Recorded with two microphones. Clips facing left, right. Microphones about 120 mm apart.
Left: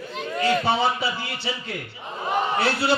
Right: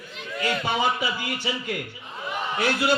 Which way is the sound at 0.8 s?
15° right (ahead or behind).